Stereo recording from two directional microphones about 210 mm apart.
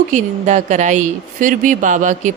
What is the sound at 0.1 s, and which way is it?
Speech, 35° right (ahead or behind).